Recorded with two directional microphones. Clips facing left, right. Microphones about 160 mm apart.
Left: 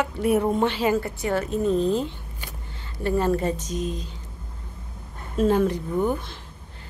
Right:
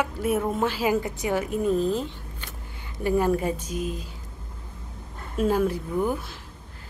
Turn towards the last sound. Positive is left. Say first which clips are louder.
# left 2 dB
turn(degrees=-5)  # may be behind; listen again after turning